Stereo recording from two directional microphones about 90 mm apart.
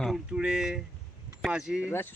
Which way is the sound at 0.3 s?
10° right (ahead or behind).